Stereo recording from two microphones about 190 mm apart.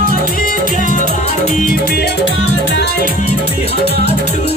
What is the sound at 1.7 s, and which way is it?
Music, 55° left (ahead or behind).